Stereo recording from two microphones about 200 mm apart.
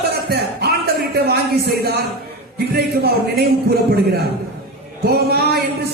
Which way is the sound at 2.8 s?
50° right (ahead or behind).